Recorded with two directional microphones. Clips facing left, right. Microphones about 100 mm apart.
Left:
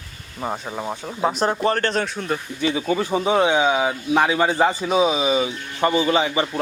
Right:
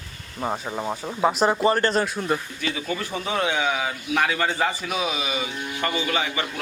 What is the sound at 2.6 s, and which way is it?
Speech, 25° left (ahead or behind).